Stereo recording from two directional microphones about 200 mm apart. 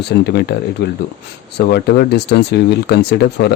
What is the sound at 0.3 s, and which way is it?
Speech, 55° left (ahead or behind).